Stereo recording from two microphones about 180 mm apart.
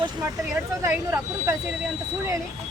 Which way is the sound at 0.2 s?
15° right (ahead or behind).